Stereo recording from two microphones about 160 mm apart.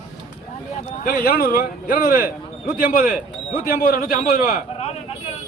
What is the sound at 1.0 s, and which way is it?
A man's voice, 70° left (ahead or behind).